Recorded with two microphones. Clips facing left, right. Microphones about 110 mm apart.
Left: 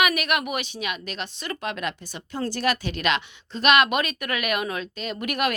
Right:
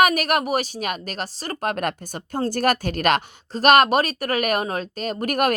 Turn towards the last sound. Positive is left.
turn(degrees=-45)  # may be behind; listen again after turning